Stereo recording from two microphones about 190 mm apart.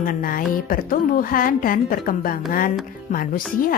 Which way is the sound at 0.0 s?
45° left (ahead or behind).